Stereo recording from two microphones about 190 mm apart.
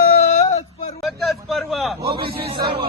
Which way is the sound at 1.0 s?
Centre (ahead or behind).